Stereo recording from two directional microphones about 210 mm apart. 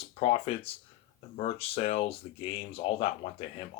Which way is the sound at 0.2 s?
25° left (ahead or behind).